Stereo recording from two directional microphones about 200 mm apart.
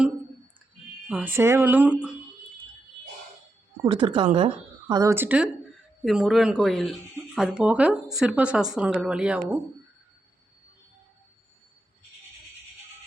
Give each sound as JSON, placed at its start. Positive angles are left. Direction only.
{"t": 1.0, "sound": "speech", "side_deg": -5}
{"t": 3.9, "sound": "speech", "side_deg": -25}
{"t": 4.9, "sound": "speech", "side_deg": -15}